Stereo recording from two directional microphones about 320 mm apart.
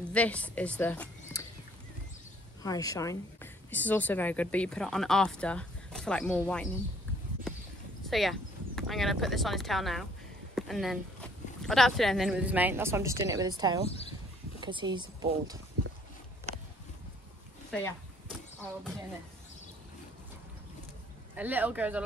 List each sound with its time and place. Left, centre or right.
0.0 s speech: centre
2.6 s a woman's voice: centre
8.1 s speech: centre
13.8 s speech: centre
14.6 s speech: centre
17.6 s speech: centre
21.4 s speech: centre